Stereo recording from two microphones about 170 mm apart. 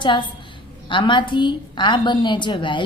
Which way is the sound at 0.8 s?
30° left (ahead or behind).